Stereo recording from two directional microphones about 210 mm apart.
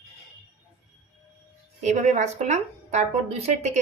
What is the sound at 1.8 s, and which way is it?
A woman's voice, 35° right (ahead or behind).